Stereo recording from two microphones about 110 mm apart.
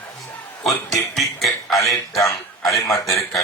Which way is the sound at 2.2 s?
30° left (ahead or behind).